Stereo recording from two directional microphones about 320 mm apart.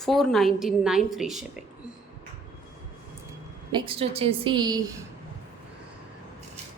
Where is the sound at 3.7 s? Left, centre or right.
Centre.